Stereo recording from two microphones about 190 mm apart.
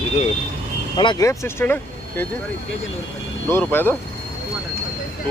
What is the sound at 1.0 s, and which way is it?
Speech, 20° left (ahead or behind).